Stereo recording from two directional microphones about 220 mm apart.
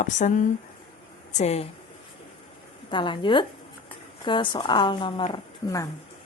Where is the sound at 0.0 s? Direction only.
35° left (ahead or behind).